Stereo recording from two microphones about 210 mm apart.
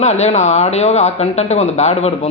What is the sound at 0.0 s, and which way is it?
A man's voice, 30° left (ahead or behind).